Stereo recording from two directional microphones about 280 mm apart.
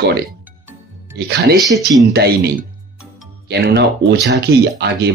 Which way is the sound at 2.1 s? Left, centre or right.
Right.